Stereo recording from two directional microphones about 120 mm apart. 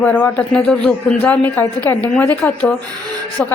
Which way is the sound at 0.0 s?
10° left (ahead or behind).